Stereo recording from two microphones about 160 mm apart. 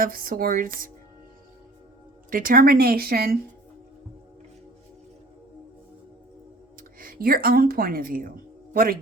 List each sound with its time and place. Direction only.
0.0 s a woman's voice: 60° right (ahead or behind)
2.3 s a woman's voice: 60° right (ahead or behind)
7.0 s a woman's voice: 65° right (ahead or behind)